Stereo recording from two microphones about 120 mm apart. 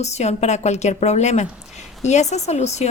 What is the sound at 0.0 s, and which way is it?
A woman's voice, 70° left (ahead or behind).